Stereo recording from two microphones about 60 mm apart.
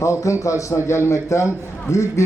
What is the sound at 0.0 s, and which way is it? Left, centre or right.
A man's voice, left.